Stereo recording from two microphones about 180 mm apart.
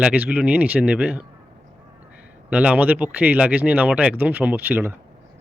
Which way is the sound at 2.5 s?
10° right (ahead or behind).